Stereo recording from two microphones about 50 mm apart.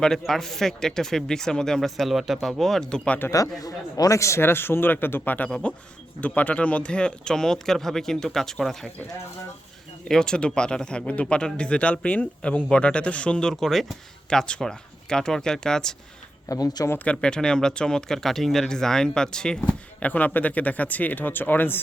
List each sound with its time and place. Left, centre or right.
0.0 s speech: centre
2.1 s speech: centre
4.1 s speech: left
4.4 s speech: left; by 8.9 s centre
10.1 s speech: centre
13.5 s speech: centre
14.3 s speech: centre
16.5 s speech: left
17.0 s speech: left
19.6 s speech: left